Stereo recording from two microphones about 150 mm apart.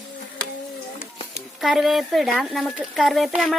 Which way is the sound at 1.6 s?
Centre (ahead or behind).